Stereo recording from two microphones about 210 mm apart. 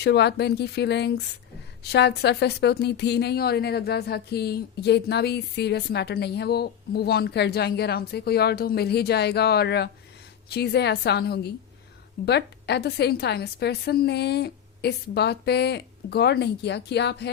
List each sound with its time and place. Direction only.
0.0 s a woman's voice: 50° left (ahead or behind)